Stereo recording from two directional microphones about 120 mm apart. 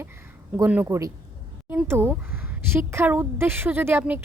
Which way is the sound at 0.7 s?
20° right (ahead or behind).